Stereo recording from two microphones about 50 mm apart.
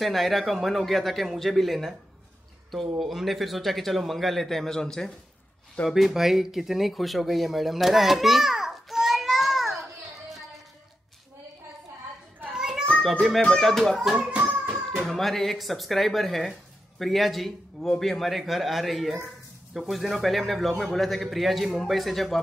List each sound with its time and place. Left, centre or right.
0.0 s a man's voice: centre
5.9 s speech: centre
12.5 s a sound: centre
13.4 s a child's voice: centre